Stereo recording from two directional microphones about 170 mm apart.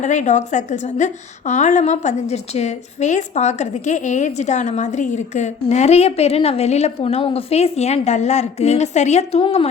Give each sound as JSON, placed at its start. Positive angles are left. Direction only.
{"t": 0.0, "sound": "a woman's voice", "side_deg": 45}